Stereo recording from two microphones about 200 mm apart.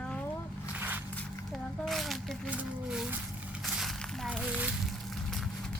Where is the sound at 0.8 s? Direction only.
10° right (ahead or behind).